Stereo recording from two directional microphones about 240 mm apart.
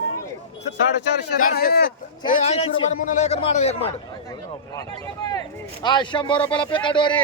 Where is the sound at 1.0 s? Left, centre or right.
Left.